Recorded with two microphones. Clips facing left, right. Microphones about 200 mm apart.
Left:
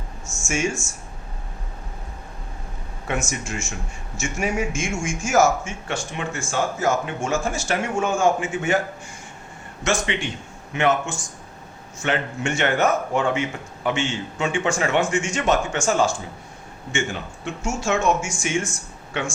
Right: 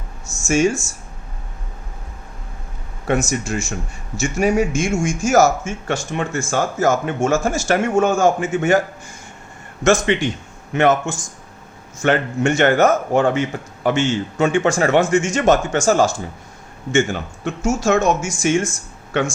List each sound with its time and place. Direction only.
0.3 s speech: 35° right (ahead or behind)
3.1 s a man's voice: 35° right (ahead or behind)
9.8 s a man's voice: 45° right (ahead or behind)